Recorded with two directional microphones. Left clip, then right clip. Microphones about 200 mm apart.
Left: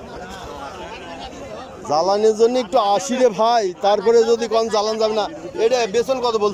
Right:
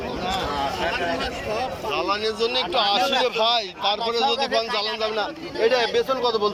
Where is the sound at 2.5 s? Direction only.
35° left (ahead or behind).